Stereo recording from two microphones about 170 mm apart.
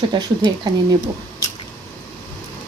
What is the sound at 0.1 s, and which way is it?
Speech, 25° right (ahead or behind).